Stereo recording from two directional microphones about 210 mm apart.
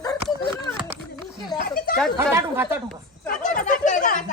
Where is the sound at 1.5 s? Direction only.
45° left (ahead or behind).